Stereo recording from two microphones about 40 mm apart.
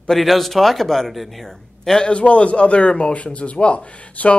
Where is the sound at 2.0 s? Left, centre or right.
Left.